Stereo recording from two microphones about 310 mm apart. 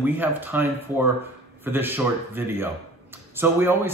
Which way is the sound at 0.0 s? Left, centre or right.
Centre.